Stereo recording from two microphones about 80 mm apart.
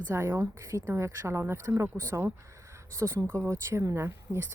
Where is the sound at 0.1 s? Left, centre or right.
Right.